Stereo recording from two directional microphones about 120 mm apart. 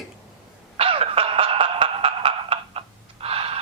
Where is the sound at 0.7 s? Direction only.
55° right (ahead or behind).